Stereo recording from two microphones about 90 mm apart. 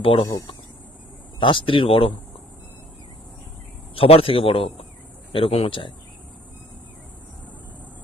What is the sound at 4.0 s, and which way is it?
Speech, 90° left.